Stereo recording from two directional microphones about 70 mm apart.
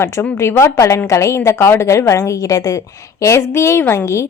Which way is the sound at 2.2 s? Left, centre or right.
Left.